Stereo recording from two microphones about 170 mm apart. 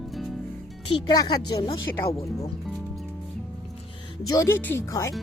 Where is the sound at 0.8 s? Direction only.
25° left (ahead or behind).